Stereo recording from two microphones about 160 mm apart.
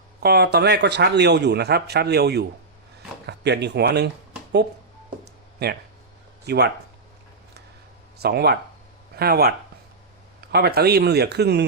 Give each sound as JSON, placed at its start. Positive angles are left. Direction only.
{"t": 0.2, "sound": "speech", "side_deg": -85}
{"t": 5.6, "sound": "speech", "side_deg": -90}
{"t": 8.2, "sound": "speech", "side_deg": -85}